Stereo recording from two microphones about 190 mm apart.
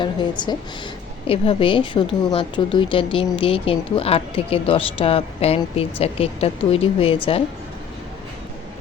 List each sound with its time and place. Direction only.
0.0 s a woman's voice: 25° left (ahead or behind)